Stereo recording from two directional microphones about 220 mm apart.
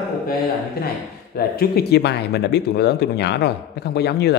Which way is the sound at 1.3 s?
45° left (ahead or behind).